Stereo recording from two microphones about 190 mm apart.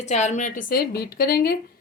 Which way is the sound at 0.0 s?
40° left (ahead or behind).